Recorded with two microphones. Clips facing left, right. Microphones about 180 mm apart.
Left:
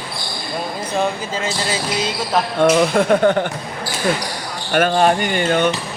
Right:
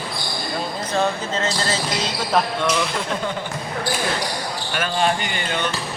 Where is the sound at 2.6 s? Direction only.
50° left (ahead or behind).